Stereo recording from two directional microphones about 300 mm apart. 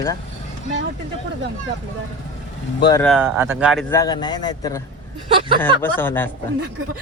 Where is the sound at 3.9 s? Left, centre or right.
Centre.